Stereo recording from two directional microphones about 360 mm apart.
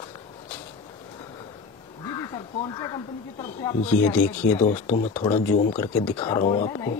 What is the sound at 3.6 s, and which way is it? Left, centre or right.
Speech, centre.